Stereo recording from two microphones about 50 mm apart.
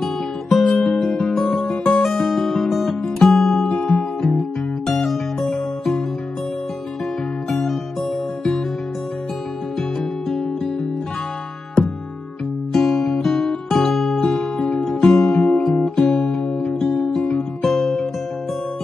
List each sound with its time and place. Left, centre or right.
0.0 s music: centre
12.7 s music: centre
15.3 s guitar: left
16.4 s music: left
17.6 s music: centre